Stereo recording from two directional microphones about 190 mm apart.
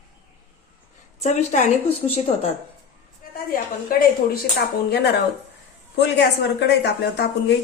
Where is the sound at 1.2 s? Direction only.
35° left (ahead or behind).